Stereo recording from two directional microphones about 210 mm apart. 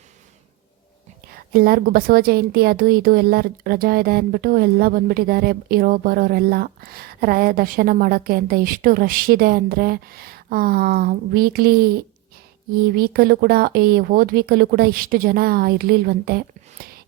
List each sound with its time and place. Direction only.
1.3 s a woman's voice: 45° right (ahead or behind)